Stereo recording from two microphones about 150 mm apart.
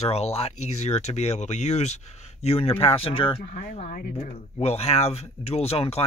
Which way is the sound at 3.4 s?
60° left (ahead or behind).